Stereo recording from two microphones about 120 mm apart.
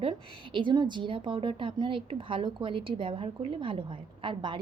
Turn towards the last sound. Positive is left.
turn(degrees=-45)  # may be behind; listen again after turning